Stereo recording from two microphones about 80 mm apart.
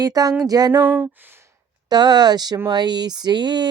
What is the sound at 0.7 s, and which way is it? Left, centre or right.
Speech, right.